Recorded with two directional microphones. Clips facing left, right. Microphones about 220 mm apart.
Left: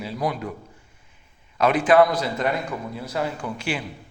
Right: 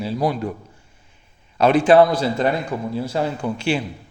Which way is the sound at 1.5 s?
30° right (ahead or behind).